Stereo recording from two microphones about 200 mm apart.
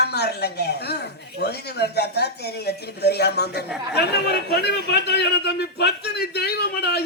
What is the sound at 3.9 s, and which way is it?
A man's voice, 55° left (ahead or behind).